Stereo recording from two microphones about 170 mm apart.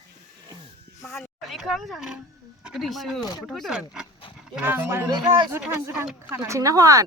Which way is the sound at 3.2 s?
25° left (ahead or behind).